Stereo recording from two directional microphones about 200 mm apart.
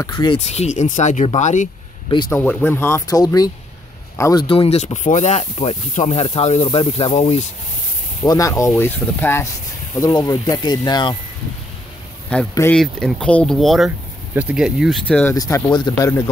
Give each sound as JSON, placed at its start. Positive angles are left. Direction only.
{"t": 0.0, "sound": "speech", "side_deg": 20}
{"t": 2.0, "sound": "speech", "side_deg": 20}
{"t": 2.3, "sound": "speech", "side_deg": 10}
{"t": 8.2, "sound": "speech", "side_deg": 15}
{"t": 12.3, "sound": "speech", "side_deg": 10}
{"t": 15.3, "sound": "speech", "side_deg": 20}